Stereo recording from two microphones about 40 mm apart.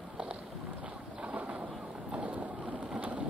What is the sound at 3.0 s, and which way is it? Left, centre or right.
Rain, right.